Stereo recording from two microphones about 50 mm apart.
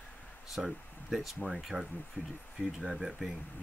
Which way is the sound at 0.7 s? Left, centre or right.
Centre.